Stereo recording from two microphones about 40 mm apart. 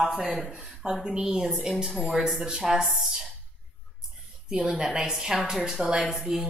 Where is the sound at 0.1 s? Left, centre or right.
Centre.